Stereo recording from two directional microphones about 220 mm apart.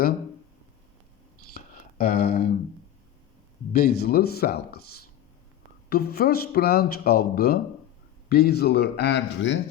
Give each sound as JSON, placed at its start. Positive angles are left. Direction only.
{"t": 1.5, "sound": "a sound", "side_deg": 45}
{"t": 3.7, "sound": "speech", "side_deg": 45}
{"t": 5.9, "sound": "speech", "side_deg": 45}